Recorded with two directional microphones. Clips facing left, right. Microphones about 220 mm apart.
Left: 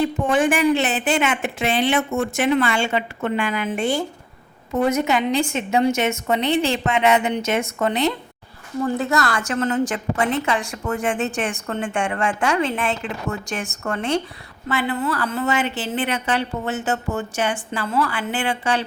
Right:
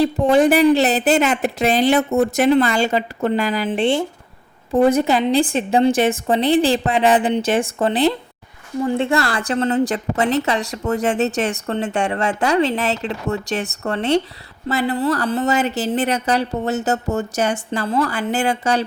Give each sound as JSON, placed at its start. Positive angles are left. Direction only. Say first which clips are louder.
{"t": 0.0, "sound": "a woman's voice", "louder": "right 5 dB", "side_deg": -35}